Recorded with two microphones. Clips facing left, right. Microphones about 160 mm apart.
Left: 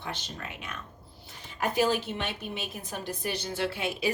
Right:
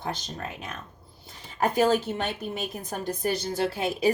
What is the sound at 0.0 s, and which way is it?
Speech, 40° right (ahead or behind).